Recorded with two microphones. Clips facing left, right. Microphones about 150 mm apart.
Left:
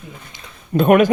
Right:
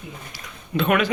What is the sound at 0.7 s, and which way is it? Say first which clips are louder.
Speech: left 8 dB; 45° left (ahead or behind).